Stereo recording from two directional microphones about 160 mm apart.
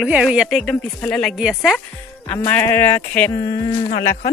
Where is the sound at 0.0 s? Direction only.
5° right (ahead or behind).